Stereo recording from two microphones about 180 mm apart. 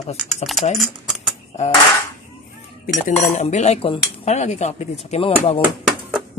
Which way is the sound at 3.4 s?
40° left (ahead or behind).